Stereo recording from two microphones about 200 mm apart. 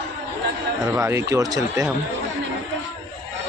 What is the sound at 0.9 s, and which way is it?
Speech, 15° right (ahead or behind).